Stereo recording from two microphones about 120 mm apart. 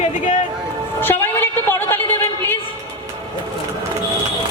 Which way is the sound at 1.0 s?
15° left (ahead or behind).